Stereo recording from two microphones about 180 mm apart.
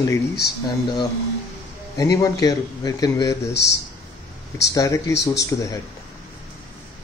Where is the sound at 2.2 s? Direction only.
20° left (ahead or behind).